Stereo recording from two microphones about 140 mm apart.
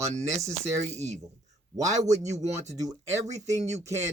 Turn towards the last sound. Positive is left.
turn(degrees=-55)  # may be behind; listen again after turning